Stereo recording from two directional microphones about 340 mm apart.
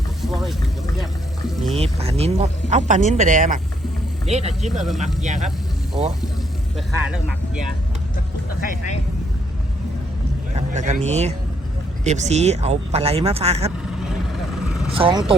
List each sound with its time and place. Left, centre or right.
1.7 s speech: centre
4.7 s speech: centre
5.9 s speech: centre
6.7 s speech: centre
10.5 s speech: right
14.3 s vehicle: centre
14.9 s speech: centre